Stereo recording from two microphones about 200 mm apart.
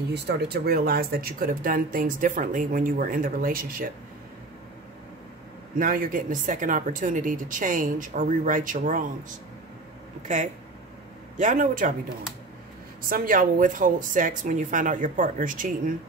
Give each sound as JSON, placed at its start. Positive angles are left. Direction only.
{"t": 0.1, "sound": "speech", "side_deg": -50}
{"t": 5.8, "sound": "speech", "side_deg": -45}
{"t": 10.2, "sound": "speech", "side_deg": -40}
{"t": 13.1, "sound": "speech", "side_deg": -45}